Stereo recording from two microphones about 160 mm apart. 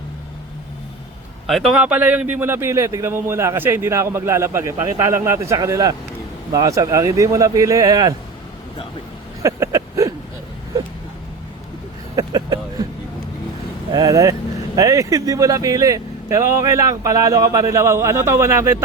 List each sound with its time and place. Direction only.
1.5 s a man's voice: centre (ahead or behind); by 8.1 s 20° right (ahead or behind)
9.4 s vehicle: 20° right (ahead or behind)
12.1 s vehicle: 25° right (ahead or behind)
13.9 s speech: 25° right (ahead or behind)